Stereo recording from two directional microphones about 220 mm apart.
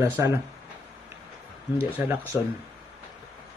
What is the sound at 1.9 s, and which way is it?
Speech, 10° right (ahead or behind).